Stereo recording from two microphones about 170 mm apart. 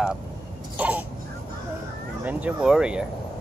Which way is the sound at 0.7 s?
10° right (ahead or behind).